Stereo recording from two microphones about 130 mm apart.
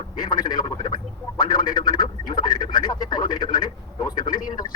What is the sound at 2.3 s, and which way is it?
Radio, 35° left (ahead or behind).